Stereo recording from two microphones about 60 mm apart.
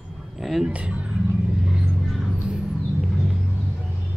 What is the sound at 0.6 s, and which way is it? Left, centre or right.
Speech, centre.